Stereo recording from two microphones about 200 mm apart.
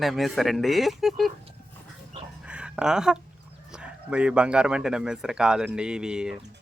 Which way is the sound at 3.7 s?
5° right (ahead or behind).